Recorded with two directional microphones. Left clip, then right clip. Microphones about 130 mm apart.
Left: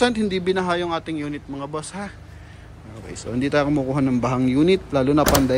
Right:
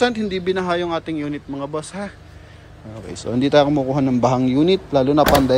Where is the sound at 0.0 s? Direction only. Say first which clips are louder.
Right 1 dB; 20° right (ahead or behind).